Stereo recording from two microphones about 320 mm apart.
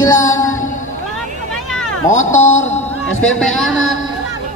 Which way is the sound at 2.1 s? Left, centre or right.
Left.